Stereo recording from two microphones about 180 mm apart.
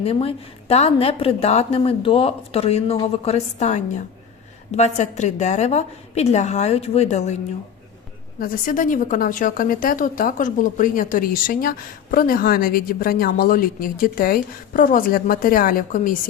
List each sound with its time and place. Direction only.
0.0 s a woman's voice: 35° left (ahead or behind)
8.4 s a woman's voice: 50° left (ahead or behind)